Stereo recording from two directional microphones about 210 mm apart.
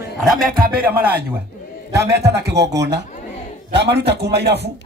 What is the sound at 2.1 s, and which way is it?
A man's voice, 50° right (ahead or behind).